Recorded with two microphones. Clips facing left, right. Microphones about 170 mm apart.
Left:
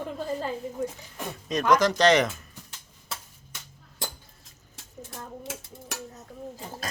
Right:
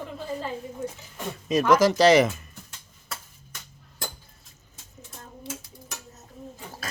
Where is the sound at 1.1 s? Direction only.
5° right (ahead or behind).